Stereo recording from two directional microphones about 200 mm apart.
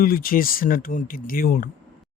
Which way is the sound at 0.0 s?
45° left (ahead or behind).